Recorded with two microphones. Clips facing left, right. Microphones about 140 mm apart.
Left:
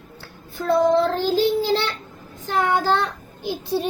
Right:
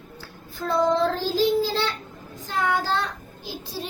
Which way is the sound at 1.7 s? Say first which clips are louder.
Left 4 dB; 65° left (ahead or behind).